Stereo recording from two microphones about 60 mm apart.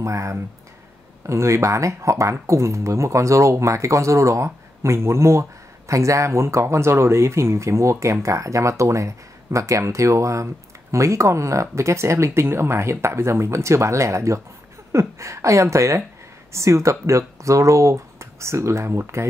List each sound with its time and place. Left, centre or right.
0.0 s speech: right